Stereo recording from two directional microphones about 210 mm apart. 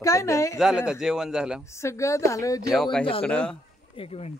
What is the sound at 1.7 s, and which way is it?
Speech, 15° left (ahead or behind).